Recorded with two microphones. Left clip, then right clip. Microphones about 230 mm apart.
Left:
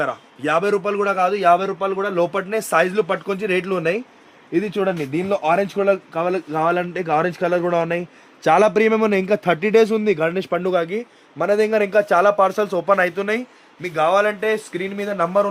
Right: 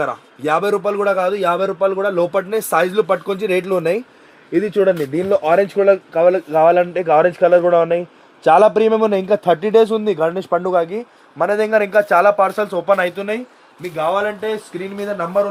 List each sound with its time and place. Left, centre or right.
0.0 s a man's voice: centre
4.5 s speech: left
6.1 s a man's voice: left
8.4 s speech: left
10.5 s a man's voice: left
11.6 s speech: centre